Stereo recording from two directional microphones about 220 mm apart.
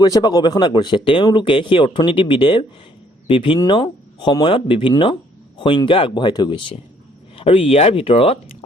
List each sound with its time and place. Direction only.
0.0 s speech: 15° left (ahead or behind)